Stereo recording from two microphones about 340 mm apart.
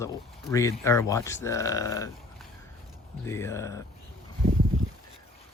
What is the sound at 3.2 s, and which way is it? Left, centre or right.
Speech, centre.